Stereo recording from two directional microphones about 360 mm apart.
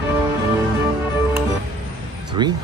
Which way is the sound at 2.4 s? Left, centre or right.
Centre.